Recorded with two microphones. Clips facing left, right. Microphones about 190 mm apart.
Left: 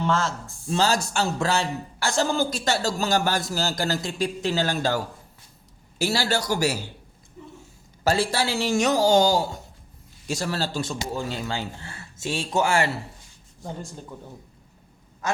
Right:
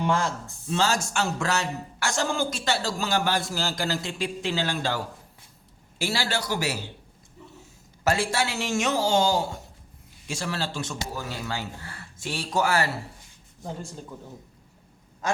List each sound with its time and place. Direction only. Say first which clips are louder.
0.0 s speech: left 1 dB; 15° right (ahead or behind)
0.7 s a man's voice: left 2 dB; 35° left (ahead or behind)
6.0 s a man's voice: left 4 dB; 40° left (ahead or behind)
8.0 s a man's voice: left 2 dB; 35° left (ahead or behind)